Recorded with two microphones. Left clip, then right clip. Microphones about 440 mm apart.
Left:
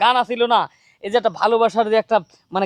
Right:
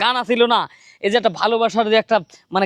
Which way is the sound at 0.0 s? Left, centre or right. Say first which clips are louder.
Even; right.